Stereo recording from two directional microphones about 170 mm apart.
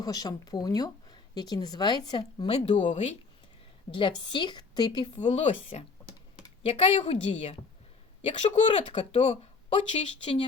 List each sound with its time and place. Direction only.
0.0 s speech: 25° left (ahead or behind); by 3.2 s 45° left (ahead or behind)
4.3 s speech: 25° left (ahead or behind)
5.1 s a woman's voice: 40° left (ahead or behind)